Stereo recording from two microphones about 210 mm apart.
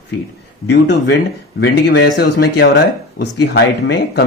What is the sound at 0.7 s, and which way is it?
Speech, 60° left (ahead or behind).